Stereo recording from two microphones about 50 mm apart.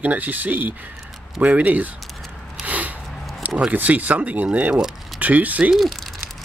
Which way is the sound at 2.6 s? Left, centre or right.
Right.